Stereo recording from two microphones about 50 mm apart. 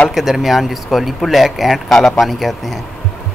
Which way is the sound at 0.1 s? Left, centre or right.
Centre.